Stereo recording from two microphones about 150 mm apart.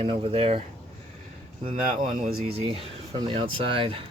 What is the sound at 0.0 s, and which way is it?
Speech, 40° right (ahead or behind).